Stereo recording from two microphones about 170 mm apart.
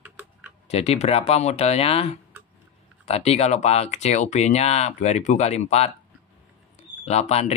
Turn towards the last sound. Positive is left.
turn(degrees=40)  # may be behind; listen again after turning